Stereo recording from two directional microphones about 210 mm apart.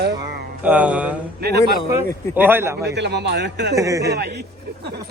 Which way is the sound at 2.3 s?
10° right (ahead or behind).